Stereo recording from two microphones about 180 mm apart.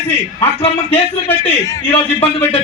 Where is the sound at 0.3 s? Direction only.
30° left (ahead or behind).